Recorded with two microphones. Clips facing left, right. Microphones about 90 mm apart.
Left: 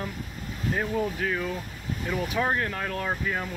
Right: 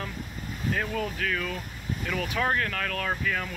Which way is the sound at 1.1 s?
20° left (ahead or behind).